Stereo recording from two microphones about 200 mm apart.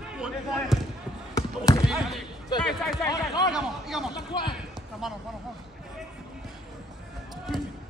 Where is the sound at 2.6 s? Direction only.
Centre (ahead or behind).